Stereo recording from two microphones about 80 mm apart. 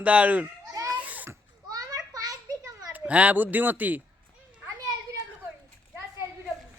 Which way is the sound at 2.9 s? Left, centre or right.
Centre.